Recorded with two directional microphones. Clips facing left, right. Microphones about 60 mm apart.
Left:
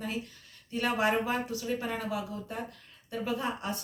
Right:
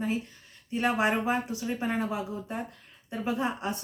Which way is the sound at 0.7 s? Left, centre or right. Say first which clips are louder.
Right 2 dB; right.